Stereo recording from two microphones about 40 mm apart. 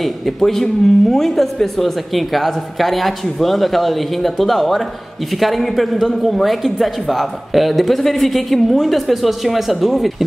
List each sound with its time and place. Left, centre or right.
0.0 s a man's voice: centre